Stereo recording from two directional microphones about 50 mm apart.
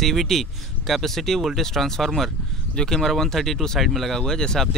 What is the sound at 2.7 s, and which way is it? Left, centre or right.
Speech, centre.